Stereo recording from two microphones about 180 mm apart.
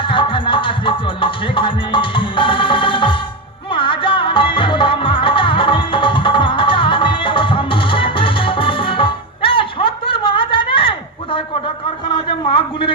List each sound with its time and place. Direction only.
0.0 s music: 25° left (ahead or behind)